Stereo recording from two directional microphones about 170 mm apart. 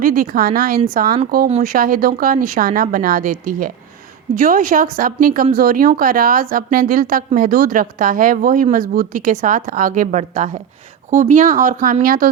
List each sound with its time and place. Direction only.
0.0 s a woman's voice: 55° right (ahead or behind)